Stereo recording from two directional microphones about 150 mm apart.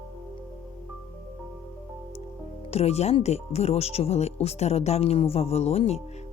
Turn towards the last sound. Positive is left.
turn(degrees=45)  # may be behind; listen again after turning